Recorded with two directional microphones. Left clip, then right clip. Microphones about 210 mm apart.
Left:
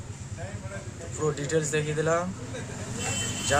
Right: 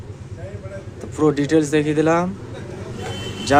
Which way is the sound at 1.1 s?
35° right (ahead or behind).